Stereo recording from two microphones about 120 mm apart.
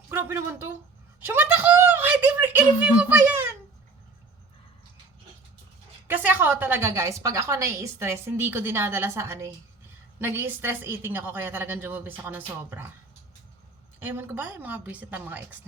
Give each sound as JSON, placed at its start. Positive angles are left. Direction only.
{"t": 0.1, "sound": "a sound", "side_deg": -20}
{"t": 2.8, "sound": "a woman's voice", "side_deg": -15}
{"t": 6.1, "sound": "a woman's voice", "side_deg": -15}
{"t": 14.0, "sound": "a woman's voice", "side_deg": -15}